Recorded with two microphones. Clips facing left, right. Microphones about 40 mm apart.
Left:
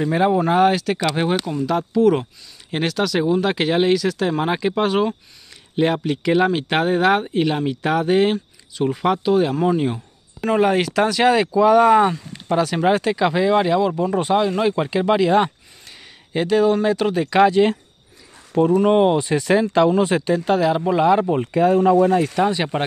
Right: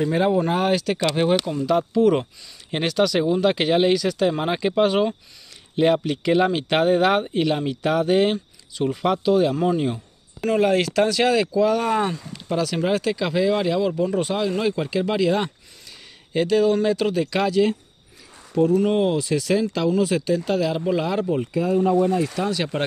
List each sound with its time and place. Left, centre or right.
0.0 s speech: centre
18.6 s speech: left
21.4 s speech: left
21.7 s speech: left
22.4 s speech: left